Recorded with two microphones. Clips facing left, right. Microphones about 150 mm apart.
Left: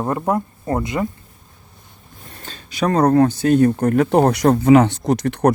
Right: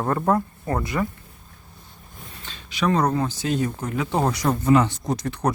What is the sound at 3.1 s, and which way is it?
Speech, 60° left (ahead or behind).